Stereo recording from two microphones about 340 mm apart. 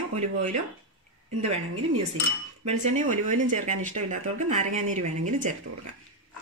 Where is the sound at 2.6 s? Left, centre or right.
Right.